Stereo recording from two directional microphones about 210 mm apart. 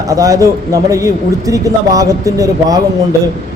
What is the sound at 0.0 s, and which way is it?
A man's voice, 15° right (ahead or behind).